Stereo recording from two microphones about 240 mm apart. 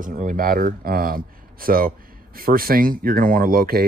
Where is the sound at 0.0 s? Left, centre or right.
Right.